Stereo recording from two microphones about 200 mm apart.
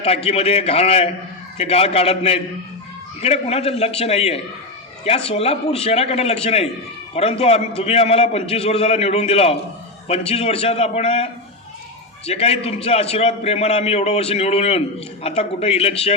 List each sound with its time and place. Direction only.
0.3 s a man's voice: 30° left (ahead or behind)